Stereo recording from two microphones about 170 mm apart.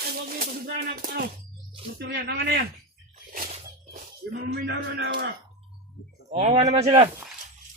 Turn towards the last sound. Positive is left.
turn(degrees=-40)  # may be behind; listen again after turning